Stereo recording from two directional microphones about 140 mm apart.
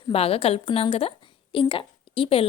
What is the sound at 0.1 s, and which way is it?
A woman's voice, 45° left (ahead or behind).